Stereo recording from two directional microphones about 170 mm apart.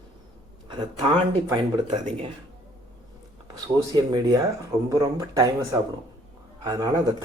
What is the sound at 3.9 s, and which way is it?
A man's voice, 25° right (ahead or behind).